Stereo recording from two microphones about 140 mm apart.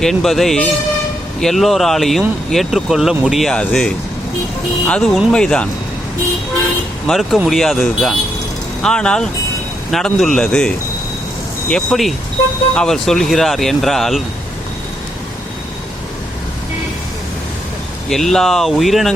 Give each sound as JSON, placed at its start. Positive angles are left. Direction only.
{"t": 0.0, "sound": "speech", "side_deg": 0}
{"t": 7.1, "sound": "speech", "side_deg": 0}
{"t": 11.7, "sound": "speech", "side_deg": 0}
{"t": 18.1, "sound": "speech", "side_deg": 0}